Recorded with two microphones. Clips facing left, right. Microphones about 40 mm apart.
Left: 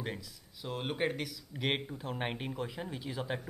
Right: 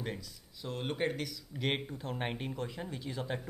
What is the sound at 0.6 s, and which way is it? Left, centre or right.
Speech, centre.